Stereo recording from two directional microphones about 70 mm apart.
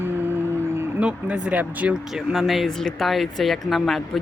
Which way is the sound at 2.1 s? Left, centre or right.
Centre.